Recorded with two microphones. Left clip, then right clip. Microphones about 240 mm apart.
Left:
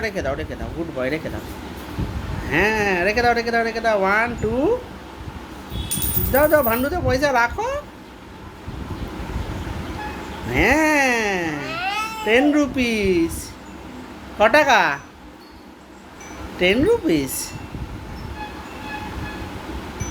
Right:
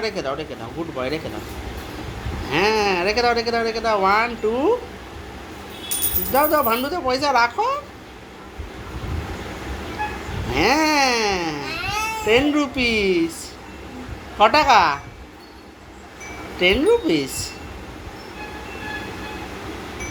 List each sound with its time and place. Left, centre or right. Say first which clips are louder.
0.0 s speech: even; centre
2.5 s speech: even; centre
6.3 s speech: left 1 dB; centre
10.5 s speech: left 1 dB; centre
14.3 s speech: right 1 dB; centre
16.6 s speech: right 1 dB; centre